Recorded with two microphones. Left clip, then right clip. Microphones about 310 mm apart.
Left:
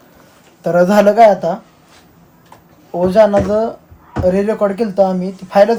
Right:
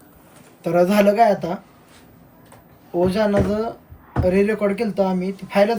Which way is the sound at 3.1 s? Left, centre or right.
Centre.